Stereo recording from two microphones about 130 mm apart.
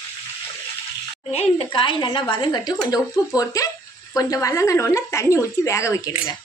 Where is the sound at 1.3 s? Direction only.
50° left (ahead or behind); by 6.1 s 25° left (ahead or behind).